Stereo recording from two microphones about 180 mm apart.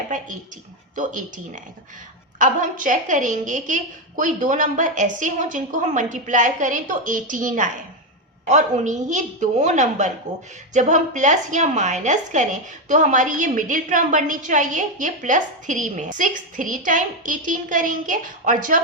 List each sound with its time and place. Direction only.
0.9 s a woman's voice: 45° right (ahead or behind)
10.3 s speech: 20° right (ahead or behind)
10.8 s a woman's voice: 40° right (ahead or behind)